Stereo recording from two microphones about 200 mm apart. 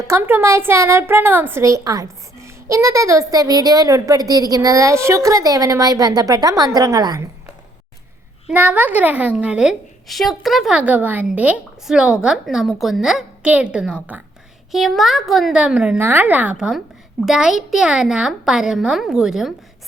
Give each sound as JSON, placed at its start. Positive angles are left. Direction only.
{"t": 0.1, "sound": "a woman's voice", "side_deg": -10}
{"t": 8.4, "sound": "speech", "side_deg": -5}